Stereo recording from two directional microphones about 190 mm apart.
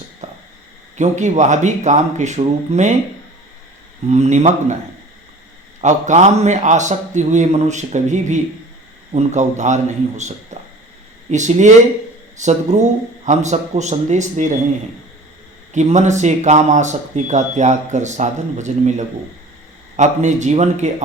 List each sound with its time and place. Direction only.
0.2 s a sound: 35° right (ahead or behind)
0.9 s speech: 40° right (ahead or behind)
4.1 s speech: 35° right (ahead or behind)
5.8 s speech: 35° right (ahead or behind)
15.7 s speech: 40° right (ahead or behind)